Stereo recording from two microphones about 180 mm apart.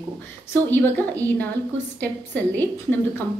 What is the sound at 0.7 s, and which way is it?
A woman's voice, 10° left (ahead or behind).